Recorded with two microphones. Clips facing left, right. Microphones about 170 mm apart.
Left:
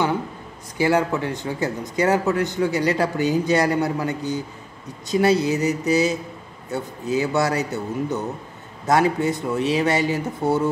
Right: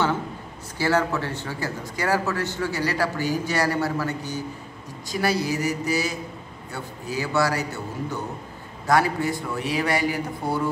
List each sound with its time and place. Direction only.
0.7 s speech: 15° left (ahead or behind)